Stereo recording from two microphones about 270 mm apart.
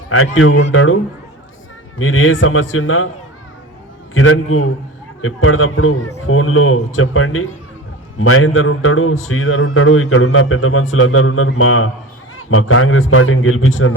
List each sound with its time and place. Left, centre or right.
0.1 s a man's voice: left
2.0 s a man's voice: left
4.1 s a man's voice: left